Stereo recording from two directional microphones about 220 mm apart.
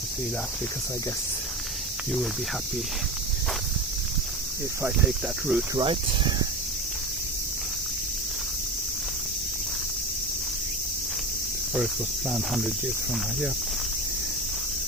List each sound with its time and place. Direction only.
4.8 s speech: 5° right (ahead or behind)
5.8 s speech: 25° right (ahead or behind)
12.3 s speech: centre (ahead or behind)